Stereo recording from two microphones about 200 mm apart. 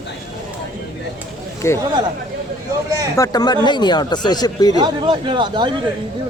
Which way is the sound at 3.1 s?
15° left (ahead or behind).